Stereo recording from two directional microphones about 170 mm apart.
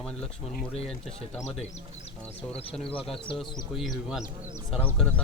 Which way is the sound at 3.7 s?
Centre (ahead or behind).